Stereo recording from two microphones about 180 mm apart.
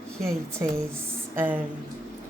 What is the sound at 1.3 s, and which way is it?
Speech, 10° right (ahead or behind).